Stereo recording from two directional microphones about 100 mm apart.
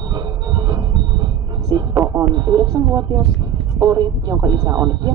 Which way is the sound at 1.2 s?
40° right (ahead or behind).